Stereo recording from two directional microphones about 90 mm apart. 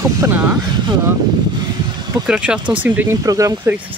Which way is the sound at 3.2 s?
40° right (ahead or behind).